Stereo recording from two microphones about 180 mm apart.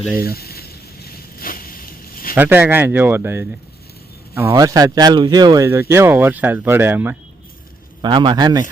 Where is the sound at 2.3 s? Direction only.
10° right (ahead or behind).